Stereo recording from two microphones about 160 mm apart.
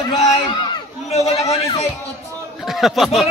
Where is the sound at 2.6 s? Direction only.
Centre (ahead or behind).